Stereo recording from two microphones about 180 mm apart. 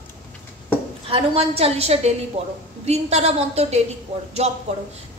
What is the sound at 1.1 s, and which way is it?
A woman's voice, 35° right (ahead or behind).